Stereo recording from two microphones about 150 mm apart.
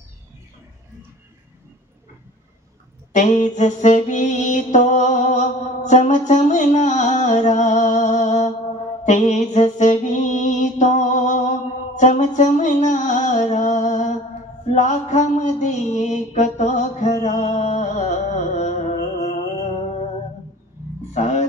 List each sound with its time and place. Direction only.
3.1 s music: 55° left (ahead or behind)
9.0 s mantra: 50° left (ahead or behind)
21.1 s music: 50° left (ahead or behind)